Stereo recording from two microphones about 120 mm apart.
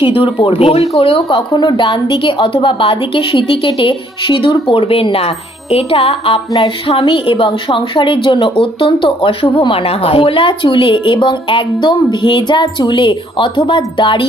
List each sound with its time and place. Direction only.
0.0 s a woman's voice: 45° left (ahead or behind)